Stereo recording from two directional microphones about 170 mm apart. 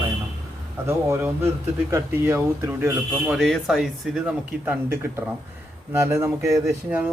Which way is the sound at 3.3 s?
Centre (ahead or behind).